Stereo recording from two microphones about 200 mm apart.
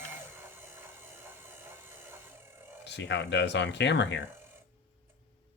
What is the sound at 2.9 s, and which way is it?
Speech, 60° left (ahead or behind).